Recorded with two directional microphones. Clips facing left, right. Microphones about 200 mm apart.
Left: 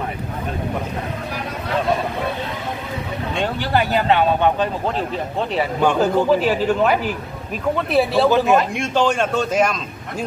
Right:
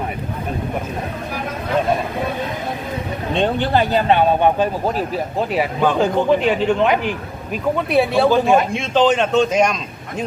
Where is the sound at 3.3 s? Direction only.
20° right (ahead or behind).